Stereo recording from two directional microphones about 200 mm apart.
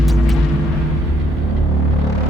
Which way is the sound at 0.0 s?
Centre (ahead or behind).